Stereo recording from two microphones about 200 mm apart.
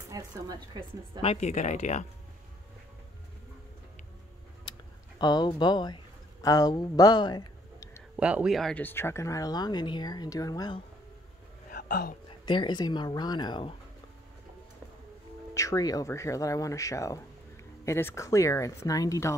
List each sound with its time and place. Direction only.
0.1 s a woman's voice: 20° right (ahead or behind)
1.2 s speech: 35° left (ahead or behind)
4.7 s a sound: 20° left (ahead or behind)
5.2 s speech: 20° left (ahead or behind)
8.2 s speech: 5° right (ahead or behind); by 10.8 s 20° left (ahead or behind)
11.7 s a sound: 45° left (ahead or behind)
12.3 s speech: 25° left (ahead or behind)
15.5 s speech: 15° left (ahead or behind)